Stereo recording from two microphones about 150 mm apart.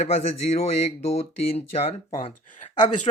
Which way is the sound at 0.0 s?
45° left (ahead or behind).